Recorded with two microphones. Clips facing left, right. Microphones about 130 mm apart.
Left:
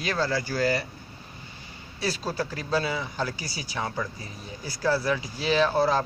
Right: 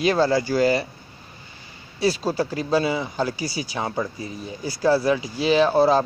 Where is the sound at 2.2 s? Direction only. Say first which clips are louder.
Right 6 dB; 15° right (ahead or behind).